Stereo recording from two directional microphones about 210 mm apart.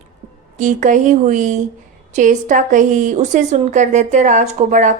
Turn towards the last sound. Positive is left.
turn(degrees=-35)  # may be behind; listen again after turning